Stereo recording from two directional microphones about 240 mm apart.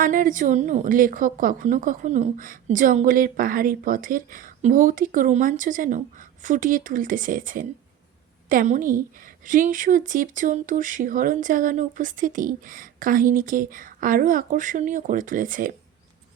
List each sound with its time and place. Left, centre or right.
0.0 s speech: right